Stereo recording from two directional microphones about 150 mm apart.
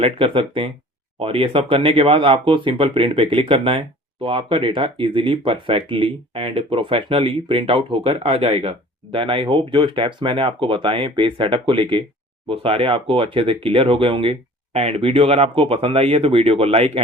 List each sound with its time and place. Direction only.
0.0 s speech: 40° right (ahead or behind)